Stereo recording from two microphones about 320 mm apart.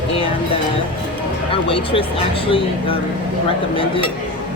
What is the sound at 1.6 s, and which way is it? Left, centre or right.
Speech, centre.